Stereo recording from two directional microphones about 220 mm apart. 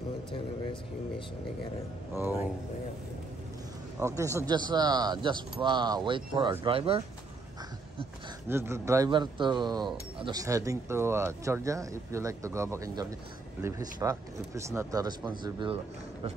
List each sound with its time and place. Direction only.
4.2 s speech: 15° right (ahead or behind)
8.5 s speech: 10° right (ahead or behind)